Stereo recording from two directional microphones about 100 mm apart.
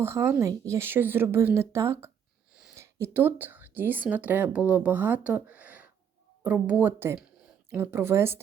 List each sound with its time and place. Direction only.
0.0 s a woman's voice: 25° right (ahead or behind)